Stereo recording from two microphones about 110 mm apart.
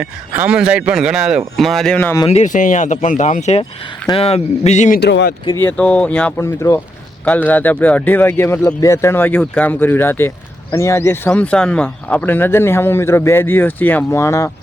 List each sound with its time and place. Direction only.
0.0 s a man's voice: 15° right (ahead or behind); by 2.0 s 5° left (ahead or behind)
2.5 s speech: 90° left
4.1 s speech: 65° left (ahead or behind); by 4.9 s 85° left
5.5 s speech: 15° left (ahead or behind)
6.4 s speech: 25° left (ahead or behind)
7.3 s speech: 15° left (ahead or behind)
11.3 s speech: 10° left (ahead or behind); by 14.5 s 25° left (ahead or behind)